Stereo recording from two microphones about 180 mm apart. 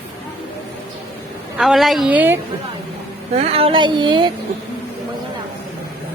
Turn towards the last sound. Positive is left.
turn(degrees=-25)  # may be behind; listen again after turning